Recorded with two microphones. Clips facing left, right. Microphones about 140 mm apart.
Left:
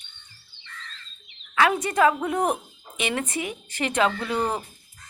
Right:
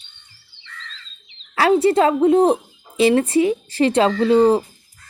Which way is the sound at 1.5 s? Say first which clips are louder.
Right 7 dB; 30° right (ahead or behind).